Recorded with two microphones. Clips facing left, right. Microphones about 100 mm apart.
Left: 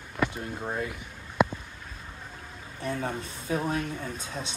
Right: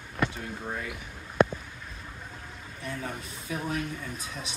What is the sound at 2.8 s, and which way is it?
Speech, 30° left (ahead or behind).